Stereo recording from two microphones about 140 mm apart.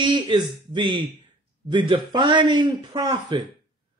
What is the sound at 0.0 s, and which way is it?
A man's voice, 35° right (ahead or behind).